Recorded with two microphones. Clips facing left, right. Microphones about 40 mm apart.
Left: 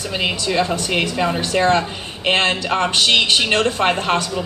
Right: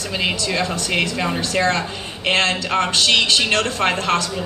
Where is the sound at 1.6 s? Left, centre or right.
Centre.